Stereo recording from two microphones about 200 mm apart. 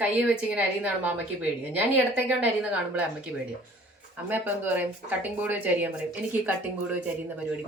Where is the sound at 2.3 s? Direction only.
5° right (ahead or behind).